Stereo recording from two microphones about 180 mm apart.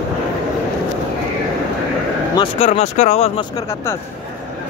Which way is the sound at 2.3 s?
30° left (ahead or behind).